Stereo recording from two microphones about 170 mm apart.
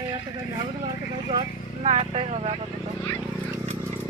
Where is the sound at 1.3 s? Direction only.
35° right (ahead or behind).